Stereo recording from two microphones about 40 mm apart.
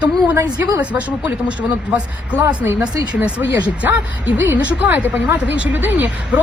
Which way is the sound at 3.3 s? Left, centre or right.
Right.